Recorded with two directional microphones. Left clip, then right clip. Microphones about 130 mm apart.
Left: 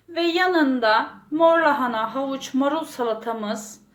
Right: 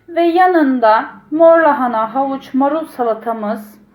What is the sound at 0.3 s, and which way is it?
A woman's voice, 15° left (ahead or behind).